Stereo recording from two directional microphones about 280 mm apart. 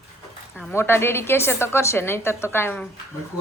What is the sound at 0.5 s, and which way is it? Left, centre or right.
A woman's voice, centre.